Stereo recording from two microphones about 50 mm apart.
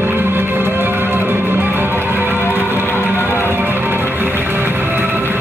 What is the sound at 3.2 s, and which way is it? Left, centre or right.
Music, left.